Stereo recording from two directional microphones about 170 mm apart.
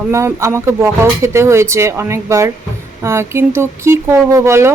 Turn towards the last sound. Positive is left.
turn(degrees=-15)  # may be behind; listen again after turning